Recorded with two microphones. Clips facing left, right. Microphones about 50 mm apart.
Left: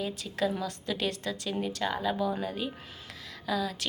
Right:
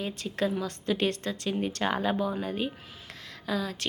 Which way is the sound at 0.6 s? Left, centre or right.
Right.